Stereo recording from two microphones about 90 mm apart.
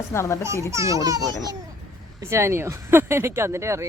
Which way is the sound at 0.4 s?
35° right (ahead or behind).